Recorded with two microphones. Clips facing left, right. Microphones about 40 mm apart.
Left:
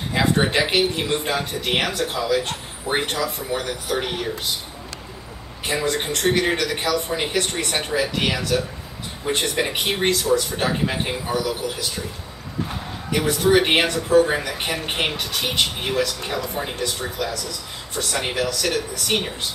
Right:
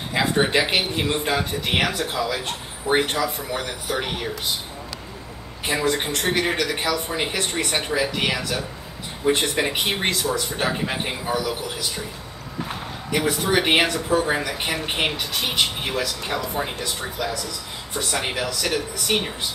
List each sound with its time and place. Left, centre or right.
0.1 s speech: centre
1.4 s speech: centre
1.7 s speech: centre
5.7 s speech: centre
13.1 s speech: centre